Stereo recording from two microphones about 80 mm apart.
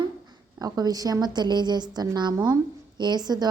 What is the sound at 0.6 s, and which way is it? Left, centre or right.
A woman's voice, right.